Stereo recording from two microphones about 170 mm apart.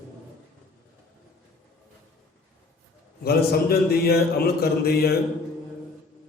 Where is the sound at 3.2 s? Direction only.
65° left (ahead or behind).